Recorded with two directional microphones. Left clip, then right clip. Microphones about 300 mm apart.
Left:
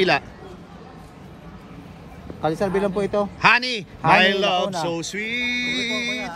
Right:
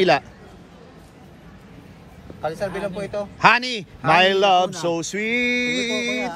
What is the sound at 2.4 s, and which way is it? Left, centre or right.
Speech, left.